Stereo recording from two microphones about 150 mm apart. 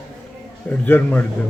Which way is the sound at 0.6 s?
10° left (ahead or behind).